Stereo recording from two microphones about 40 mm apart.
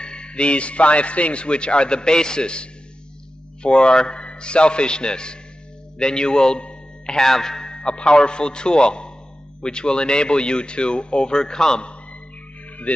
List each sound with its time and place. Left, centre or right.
0.0 s a man's voice: left
7.2 s a man's voice: centre
12.9 s speech: left